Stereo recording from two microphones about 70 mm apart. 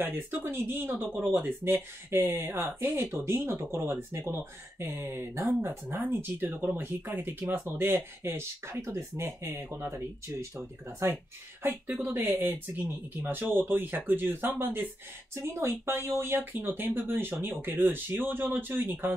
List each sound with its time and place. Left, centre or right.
0.0 s speech: right
15.3 s speech: right